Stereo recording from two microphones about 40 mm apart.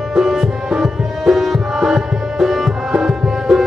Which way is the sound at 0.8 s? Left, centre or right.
Centre.